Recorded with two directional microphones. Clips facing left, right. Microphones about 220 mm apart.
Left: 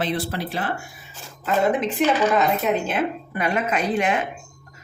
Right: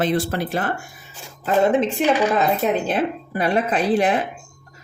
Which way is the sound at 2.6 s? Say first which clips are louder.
Right 2 dB; 35° right (ahead or behind).